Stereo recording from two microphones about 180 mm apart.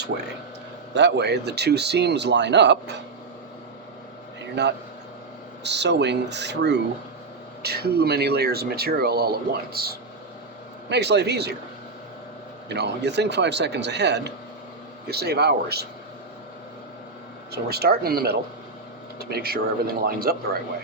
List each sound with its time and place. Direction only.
0.1 s speech: 80° right
4.6 s speech: 70° right (ahead or behind)
10.8 s speech: 70° right (ahead or behind)
12.6 s speech: 70° right (ahead or behind)
17.5 s speech: 60° right (ahead or behind)